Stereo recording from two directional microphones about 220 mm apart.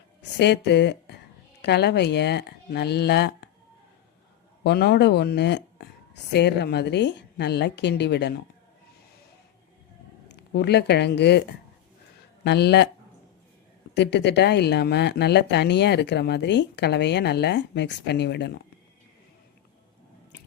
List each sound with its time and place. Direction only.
0.2 s speech: 50° left (ahead or behind)
4.6 s speech: 50° left (ahead or behind)
10.2 s speech: 50° left (ahead or behind)
13.9 s speech: 50° left (ahead or behind)